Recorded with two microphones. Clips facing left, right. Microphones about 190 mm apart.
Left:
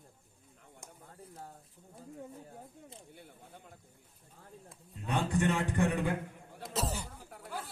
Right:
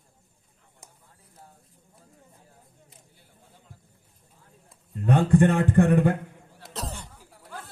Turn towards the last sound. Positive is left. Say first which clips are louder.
# left 1 dB
turn(degrees=5)  # may be behind; listen again after turning